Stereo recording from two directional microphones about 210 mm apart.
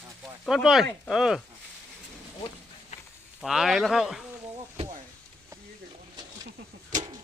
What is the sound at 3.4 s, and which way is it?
Speech, centre (ahead or behind).